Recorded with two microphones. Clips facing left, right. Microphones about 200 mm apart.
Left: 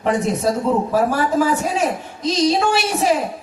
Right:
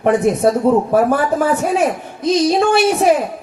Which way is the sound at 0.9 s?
55° right (ahead or behind).